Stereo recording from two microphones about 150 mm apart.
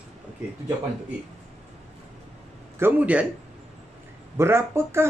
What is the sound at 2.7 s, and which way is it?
Speech, 10° right (ahead or behind).